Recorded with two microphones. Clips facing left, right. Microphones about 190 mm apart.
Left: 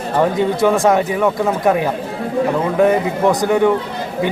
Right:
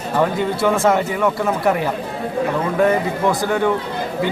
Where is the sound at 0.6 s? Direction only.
15° left (ahead or behind).